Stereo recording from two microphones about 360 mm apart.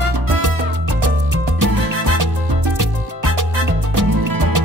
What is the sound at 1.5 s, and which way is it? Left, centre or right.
Music, right.